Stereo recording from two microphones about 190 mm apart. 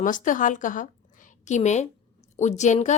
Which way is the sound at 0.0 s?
45° left (ahead or behind).